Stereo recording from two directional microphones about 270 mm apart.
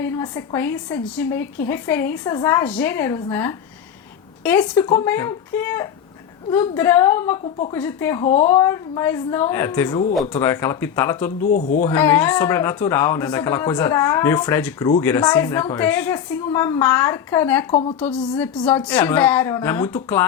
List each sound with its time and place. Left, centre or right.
0.0 s a woman's voice: centre
11.5 s speech: left
11.9 s speech: centre
17.7 s speech: left
18.3 s speech: centre